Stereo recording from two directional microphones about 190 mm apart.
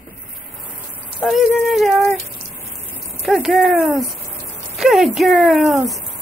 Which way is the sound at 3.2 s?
Centre (ahead or behind).